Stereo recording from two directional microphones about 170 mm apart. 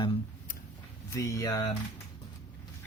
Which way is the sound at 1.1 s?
20° left (ahead or behind).